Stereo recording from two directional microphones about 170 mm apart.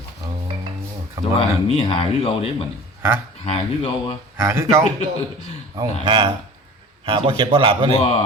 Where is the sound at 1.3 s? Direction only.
35° left (ahead or behind).